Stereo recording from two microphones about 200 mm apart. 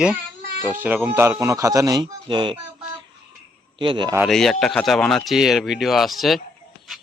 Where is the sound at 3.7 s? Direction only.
25° right (ahead or behind).